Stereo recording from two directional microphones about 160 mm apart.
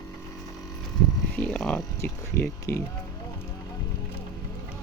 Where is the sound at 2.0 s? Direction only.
15° left (ahead or behind).